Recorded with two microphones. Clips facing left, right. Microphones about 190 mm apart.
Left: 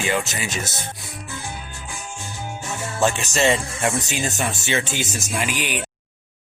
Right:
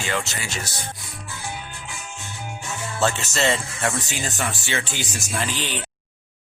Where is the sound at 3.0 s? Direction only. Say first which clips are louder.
Left 3 dB; 15° left (ahead or behind).